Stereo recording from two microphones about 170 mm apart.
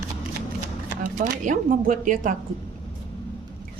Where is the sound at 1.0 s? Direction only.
50° right (ahead or behind).